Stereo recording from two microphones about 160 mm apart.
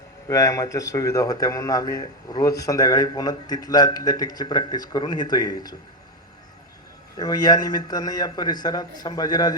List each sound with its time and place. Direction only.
0.3 s a man's voice: 20° left (ahead or behind)
7.2 s a man's voice: 25° left (ahead or behind)